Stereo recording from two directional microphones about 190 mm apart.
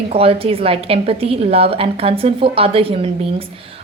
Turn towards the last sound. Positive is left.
turn(degrees=-30)  # may be behind; listen again after turning